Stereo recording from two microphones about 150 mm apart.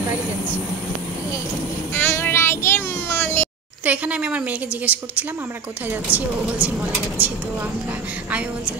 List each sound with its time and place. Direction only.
2.0 s a child's voice: 15° left (ahead or behind)
3.8 s a woman's voice: 10° right (ahead or behind)